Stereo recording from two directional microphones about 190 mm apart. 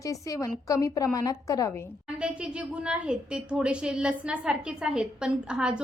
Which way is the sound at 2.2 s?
5° right (ahead or behind).